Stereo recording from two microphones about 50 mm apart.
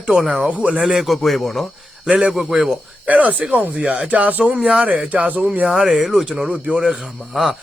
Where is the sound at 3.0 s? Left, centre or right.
Right.